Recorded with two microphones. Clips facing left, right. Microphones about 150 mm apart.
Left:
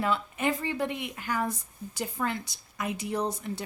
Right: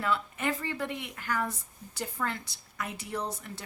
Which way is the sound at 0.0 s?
20° left (ahead or behind).